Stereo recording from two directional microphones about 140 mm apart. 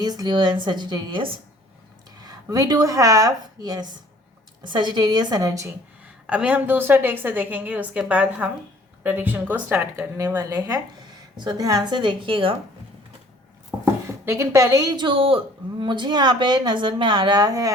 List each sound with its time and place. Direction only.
0.0 s a woman's voice: 30° right (ahead or behind)
6.2 s a woman's voice: 10° right (ahead or behind); by 12.5 s 40° right (ahead or behind)
14.3 s a woman's voice: 20° right (ahead or behind)